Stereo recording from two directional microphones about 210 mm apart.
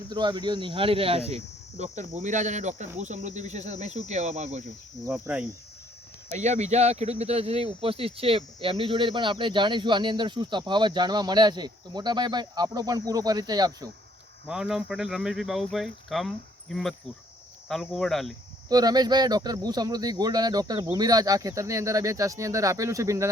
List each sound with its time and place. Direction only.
0.1 s speech: 20° right (ahead or behind)
5.1 s speech: 5° right (ahead or behind)
6.3 s speech: 35° right (ahead or behind); by 13.9 s 20° right (ahead or behind)
14.4 s speech: 5° right (ahead or behind)
18.7 s speech: 20° right (ahead or behind)